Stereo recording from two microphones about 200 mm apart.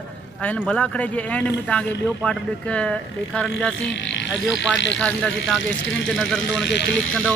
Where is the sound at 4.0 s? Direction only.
60° left (ahead or behind).